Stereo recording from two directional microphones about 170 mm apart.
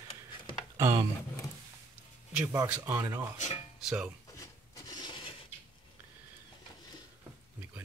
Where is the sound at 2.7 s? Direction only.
10° right (ahead or behind).